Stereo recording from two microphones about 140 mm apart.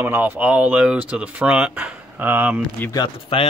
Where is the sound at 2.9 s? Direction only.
35° left (ahead or behind).